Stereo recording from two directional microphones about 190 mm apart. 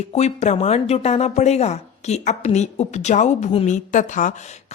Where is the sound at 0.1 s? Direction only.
35° left (ahead or behind).